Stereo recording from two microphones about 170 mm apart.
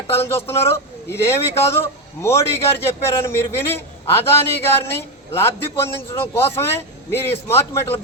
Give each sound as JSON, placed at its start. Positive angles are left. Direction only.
{"t": 0.1, "sound": "a man's voice", "side_deg": 15}